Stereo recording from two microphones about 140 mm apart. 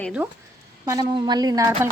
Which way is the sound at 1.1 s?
30° right (ahead or behind).